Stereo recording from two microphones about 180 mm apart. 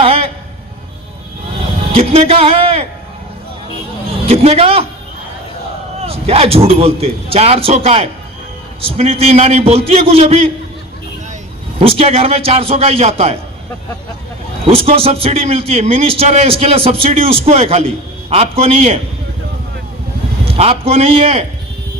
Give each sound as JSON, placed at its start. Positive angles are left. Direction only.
{"t": 0.0, "sound": "a sound", "side_deg": -30}
{"t": 1.9, "sound": "speech", "side_deg": -30}
{"t": 4.3, "sound": "a man's voice", "side_deg": -35}
{"t": 6.0, "sound": "a man's voice", "side_deg": -35}
{"t": 11.8, "sound": "a man's voice", "side_deg": -35}
{"t": 14.6, "sound": "a man's voice", "side_deg": -30}
{"t": 20.4, "sound": "a man's voice", "side_deg": -35}